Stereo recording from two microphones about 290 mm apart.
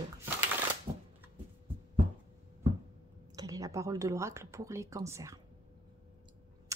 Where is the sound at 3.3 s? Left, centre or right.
Centre.